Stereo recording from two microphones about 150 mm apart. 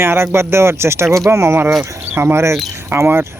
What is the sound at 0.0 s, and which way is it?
Speech, 15° right (ahead or behind).